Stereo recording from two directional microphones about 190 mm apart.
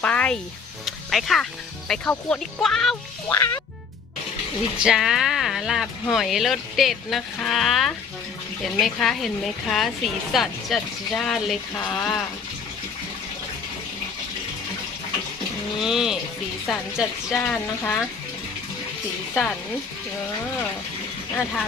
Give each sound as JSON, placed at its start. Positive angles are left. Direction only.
{"t": 0.0, "sound": "speech", "side_deg": 5}
{"t": 0.9, "sound": "music", "side_deg": 0}
{"t": 1.9, "sound": "speech", "side_deg": 5}
{"t": 3.2, "sound": "speech", "side_deg": 15}
{"t": 4.8, "sound": "speech", "side_deg": -5}
{"t": 15.8, "sound": "speech", "side_deg": 0}
{"t": 19.3, "sound": "speech", "side_deg": 10}